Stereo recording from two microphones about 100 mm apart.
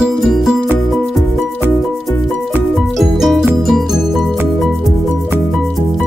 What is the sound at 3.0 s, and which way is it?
Music, centre (ahead or behind).